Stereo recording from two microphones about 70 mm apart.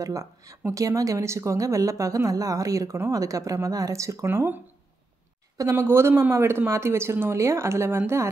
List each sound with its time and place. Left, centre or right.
0.0 s a woman's voice: right
4.3 s speech: right
5.8 s speech: right